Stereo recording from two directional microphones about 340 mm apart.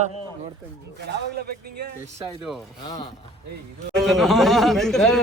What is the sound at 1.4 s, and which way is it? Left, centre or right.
Speech, right.